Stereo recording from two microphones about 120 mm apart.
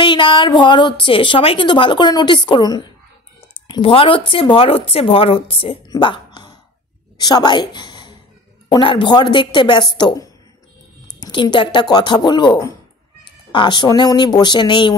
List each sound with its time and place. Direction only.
0.0 s a woman's voice: 40° left (ahead or behind)
3.6 s a woman's voice: 45° left (ahead or behind)
5.9 s a sound: 40° left (ahead or behind)
7.2 s a woman's voice: 35° left (ahead or behind)